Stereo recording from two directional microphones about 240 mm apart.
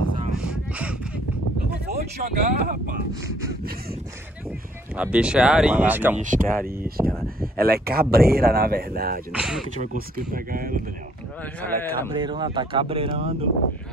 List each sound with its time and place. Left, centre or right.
0.4 s a sound: centre
1.9 s speech: right
3.3 s a sound: centre
4.9 s speech: centre
6.1 s speech: right
9.3 s speech: centre
9.8 s speech: right
11.6 s a man's voice: centre
12.1 s speech: centre